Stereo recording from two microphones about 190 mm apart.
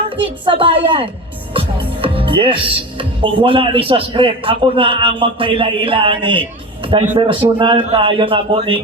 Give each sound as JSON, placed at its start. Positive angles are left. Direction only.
{"t": 0.4, "sound": "speech", "side_deg": -30}